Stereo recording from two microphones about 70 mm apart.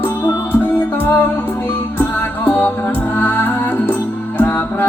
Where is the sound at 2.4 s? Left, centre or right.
Left.